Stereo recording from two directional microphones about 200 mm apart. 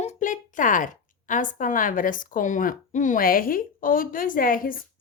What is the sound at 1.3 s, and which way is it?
A woman's voice, 40° left (ahead or behind).